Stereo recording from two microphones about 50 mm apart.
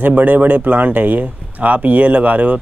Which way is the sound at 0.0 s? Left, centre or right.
Right.